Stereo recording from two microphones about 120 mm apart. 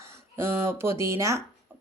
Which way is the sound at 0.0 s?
20° right (ahead or behind).